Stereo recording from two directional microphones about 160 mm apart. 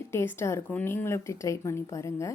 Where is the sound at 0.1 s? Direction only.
15° left (ahead or behind).